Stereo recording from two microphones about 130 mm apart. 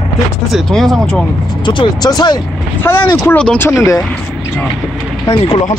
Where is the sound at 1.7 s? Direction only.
35° left (ahead or behind).